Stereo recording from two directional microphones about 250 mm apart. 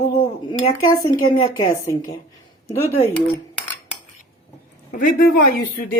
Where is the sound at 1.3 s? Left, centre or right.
Left.